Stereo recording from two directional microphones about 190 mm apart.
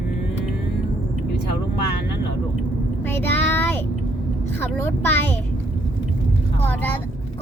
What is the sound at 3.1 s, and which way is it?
Speech, 10° left (ahead or behind).